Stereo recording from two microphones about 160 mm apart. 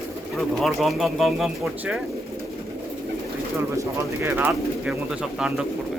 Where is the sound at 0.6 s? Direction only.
Centre (ahead or behind).